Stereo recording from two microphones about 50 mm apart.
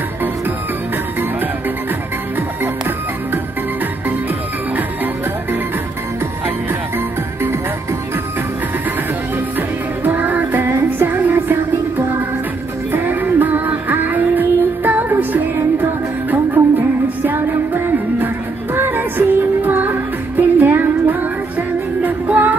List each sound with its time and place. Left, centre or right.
9.6 s music: right